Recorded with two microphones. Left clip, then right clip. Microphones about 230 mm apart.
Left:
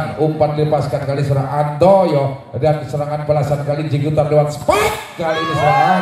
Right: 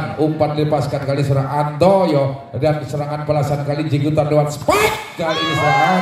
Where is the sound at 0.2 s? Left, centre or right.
Right.